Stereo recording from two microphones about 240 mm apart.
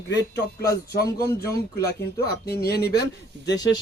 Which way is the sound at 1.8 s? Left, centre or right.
Left.